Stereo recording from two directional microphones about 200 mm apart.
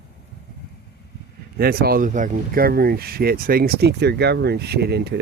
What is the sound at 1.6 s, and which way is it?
Speech, 50° right (ahead or behind).